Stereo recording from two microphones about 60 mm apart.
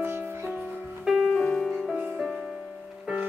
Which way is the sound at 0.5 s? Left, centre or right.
Right.